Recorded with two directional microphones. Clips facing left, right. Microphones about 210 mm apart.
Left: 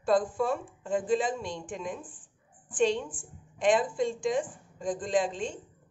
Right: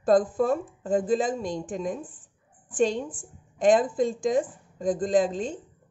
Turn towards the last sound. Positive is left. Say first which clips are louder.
# right 5 dB
turn(degrees=-40)  # may be behind; listen again after turning